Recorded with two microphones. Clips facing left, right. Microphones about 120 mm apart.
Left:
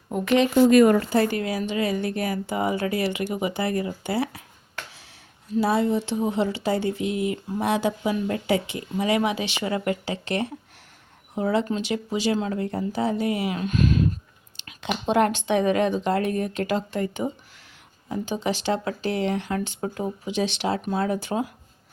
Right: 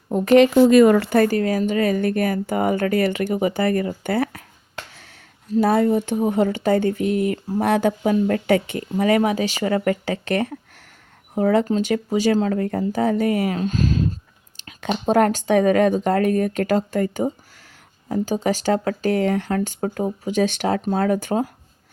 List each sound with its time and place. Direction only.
0.9 s speech: 75° right (ahead or behind)
1.2 s speech: 40° right (ahead or behind)
5.5 s speech: 50° right (ahead or behind); by 14.2 s 30° right (ahead or behind)
14.5 s speech: 40° right (ahead or behind)